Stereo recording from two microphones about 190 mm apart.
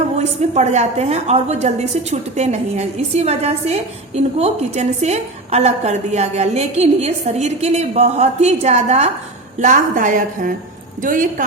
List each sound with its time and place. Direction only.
0.2 s a woman's voice: 35° right (ahead or behind)